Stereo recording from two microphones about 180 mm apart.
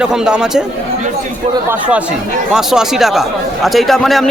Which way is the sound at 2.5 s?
5° right (ahead or behind).